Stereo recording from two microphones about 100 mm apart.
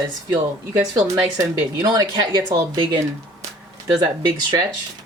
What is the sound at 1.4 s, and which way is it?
Speech, 45° right (ahead or behind).